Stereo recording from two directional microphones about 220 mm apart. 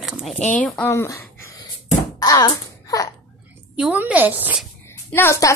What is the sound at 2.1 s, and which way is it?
Babbling, 15° left (ahead or behind).